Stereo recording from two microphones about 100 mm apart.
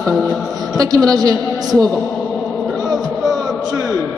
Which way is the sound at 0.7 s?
40° right (ahead or behind).